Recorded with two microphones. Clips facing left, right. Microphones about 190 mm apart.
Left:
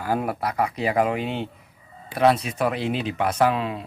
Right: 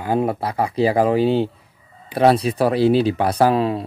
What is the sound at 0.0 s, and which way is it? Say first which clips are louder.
Speech: right 5 dB; 25° right (ahead or behind).